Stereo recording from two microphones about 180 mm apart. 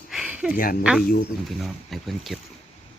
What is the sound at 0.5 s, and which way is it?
Speech, 50° left (ahead or behind).